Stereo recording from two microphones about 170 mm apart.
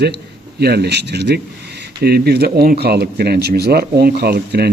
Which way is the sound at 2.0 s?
70° right (ahead or behind).